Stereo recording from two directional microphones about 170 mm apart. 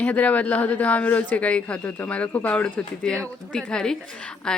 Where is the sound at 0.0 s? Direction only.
10° left (ahead or behind).